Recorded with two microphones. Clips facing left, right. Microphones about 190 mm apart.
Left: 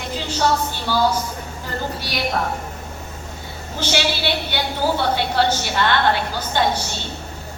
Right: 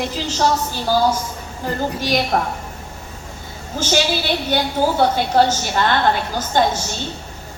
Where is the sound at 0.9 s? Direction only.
40° right (ahead or behind).